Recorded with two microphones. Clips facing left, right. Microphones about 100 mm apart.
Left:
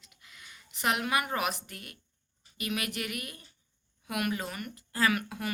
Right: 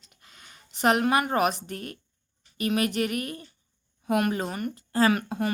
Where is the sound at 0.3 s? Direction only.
40° right (ahead or behind).